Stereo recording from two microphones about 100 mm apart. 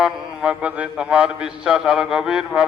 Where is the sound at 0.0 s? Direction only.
10° right (ahead or behind).